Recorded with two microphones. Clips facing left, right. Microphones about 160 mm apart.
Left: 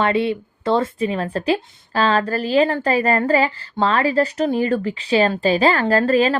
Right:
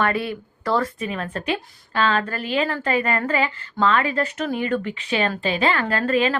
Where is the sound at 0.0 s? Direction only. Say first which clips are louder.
Left 4 dB; 25° left (ahead or behind).